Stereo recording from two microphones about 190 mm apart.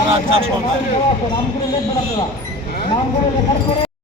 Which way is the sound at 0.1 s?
30° right (ahead or behind).